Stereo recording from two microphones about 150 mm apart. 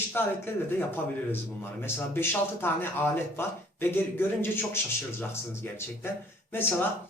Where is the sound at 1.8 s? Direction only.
15° left (ahead or behind).